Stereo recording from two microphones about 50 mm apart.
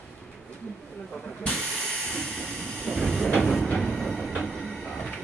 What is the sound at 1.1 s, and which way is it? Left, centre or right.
Hiss, centre.